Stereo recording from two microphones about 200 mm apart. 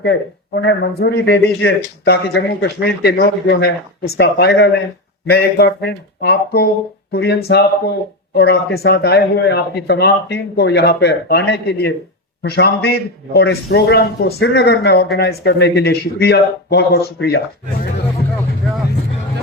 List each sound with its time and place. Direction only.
0.0 s speech: 55° left (ahead or behind)